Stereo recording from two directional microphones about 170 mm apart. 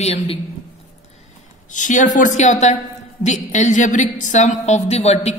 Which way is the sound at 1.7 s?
50° left (ahead or behind).